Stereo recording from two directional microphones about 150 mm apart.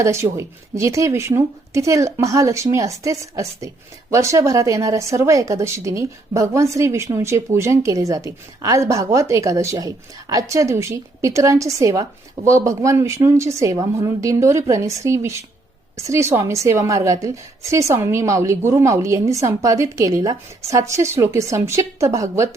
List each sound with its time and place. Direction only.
0.0 s speech: 20° right (ahead or behind)